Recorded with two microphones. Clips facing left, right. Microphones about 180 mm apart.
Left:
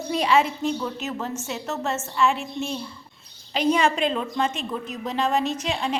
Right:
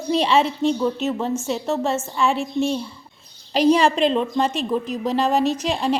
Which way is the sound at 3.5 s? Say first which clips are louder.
Right 5 dB; 35° right (ahead or behind).